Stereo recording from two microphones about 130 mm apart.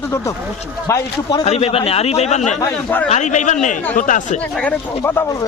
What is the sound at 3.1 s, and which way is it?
Speech, 65° left (ahead or behind).